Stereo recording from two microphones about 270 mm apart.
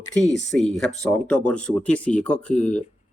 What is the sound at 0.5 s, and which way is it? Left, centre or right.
Speech, centre.